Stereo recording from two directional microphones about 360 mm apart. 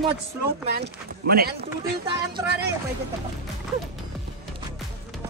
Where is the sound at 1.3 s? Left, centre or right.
Right.